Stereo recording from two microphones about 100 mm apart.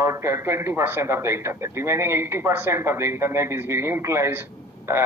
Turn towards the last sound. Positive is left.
turn(degrees=-25)  # may be behind; listen again after turning